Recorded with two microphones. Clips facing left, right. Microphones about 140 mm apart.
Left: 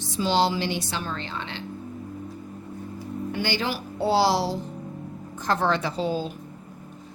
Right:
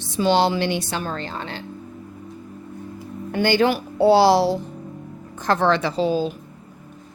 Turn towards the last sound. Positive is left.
turn(degrees=-90)